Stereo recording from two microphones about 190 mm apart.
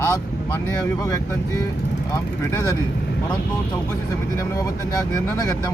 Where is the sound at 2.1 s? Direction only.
15° left (ahead or behind).